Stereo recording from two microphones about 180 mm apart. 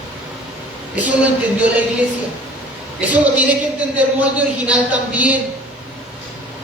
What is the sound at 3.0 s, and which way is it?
Speech, 10° right (ahead or behind).